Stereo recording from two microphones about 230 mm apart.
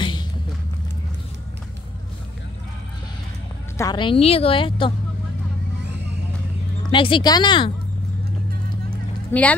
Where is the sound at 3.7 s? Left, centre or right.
Centre.